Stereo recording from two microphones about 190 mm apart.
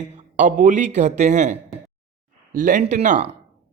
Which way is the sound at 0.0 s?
40° right (ahead or behind).